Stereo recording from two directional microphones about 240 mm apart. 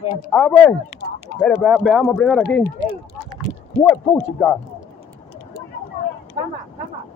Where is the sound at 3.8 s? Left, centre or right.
Centre.